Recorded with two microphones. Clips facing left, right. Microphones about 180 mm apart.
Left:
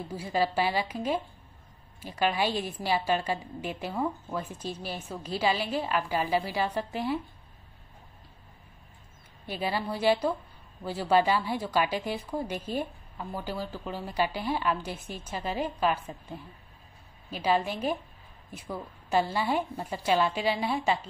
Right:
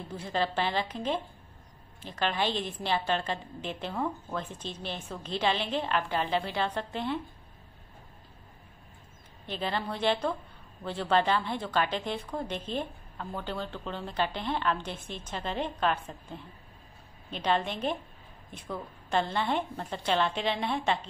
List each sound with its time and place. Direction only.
0.1 s a woman's voice: 10° left (ahead or behind)
9.5 s a woman's voice: 10° left (ahead or behind)